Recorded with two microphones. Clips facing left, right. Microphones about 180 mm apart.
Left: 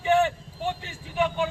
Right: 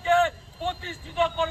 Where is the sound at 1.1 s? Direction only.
15° left (ahead or behind).